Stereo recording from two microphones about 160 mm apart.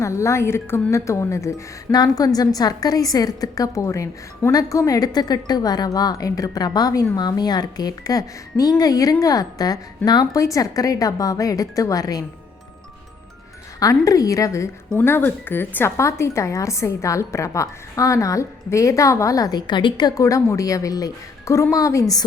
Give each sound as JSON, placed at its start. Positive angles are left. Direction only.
{"t": 0.0, "sound": "a woman's voice", "side_deg": 20}
{"t": 13.7, "sound": "a woman's voice", "side_deg": 20}